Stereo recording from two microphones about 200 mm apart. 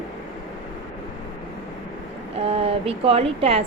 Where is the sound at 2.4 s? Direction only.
30° right (ahead or behind).